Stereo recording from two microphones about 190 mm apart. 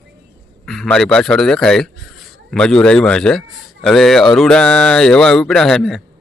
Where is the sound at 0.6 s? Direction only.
Centre (ahead or behind).